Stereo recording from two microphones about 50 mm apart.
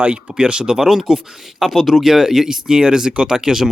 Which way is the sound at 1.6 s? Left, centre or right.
Centre.